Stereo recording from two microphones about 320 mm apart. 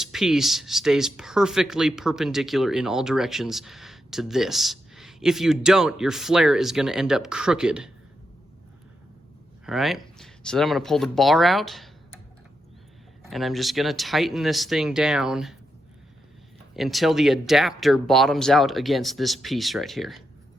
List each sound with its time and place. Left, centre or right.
0.0 s speech: centre
9.6 s speech: centre
13.2 s speech: centre
16.7 s speech: centre